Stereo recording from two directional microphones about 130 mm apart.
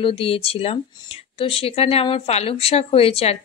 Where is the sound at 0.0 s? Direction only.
50° left (ahead or behind).